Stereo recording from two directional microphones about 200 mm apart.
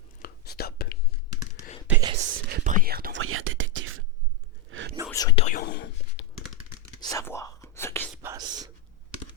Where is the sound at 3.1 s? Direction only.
85° right; by 4.9 s 65° right (ahead or behind).